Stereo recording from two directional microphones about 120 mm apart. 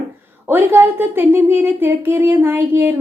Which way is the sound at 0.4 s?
20° right (ahead or behind).